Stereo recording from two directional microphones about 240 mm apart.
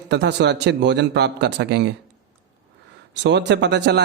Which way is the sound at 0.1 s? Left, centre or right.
Right.